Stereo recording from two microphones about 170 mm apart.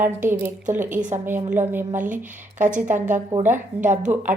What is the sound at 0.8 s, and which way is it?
Speech, 50° right (ahead or behind).